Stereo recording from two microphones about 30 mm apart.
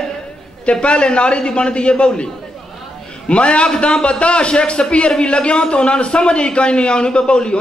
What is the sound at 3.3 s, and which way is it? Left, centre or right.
A man's voice, left.